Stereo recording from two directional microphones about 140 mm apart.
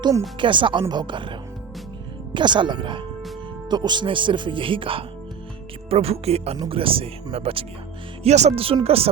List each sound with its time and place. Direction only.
0.3 s speech: 35° right (ahead or behind)
8.2 s speech: 55° right (ahead or behind)